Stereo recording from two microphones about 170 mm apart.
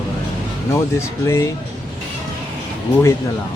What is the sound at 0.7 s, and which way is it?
Speech, 15° left (ahead or behind).